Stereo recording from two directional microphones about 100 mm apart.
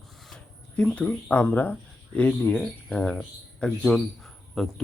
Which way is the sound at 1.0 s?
15° left (ahead or behind).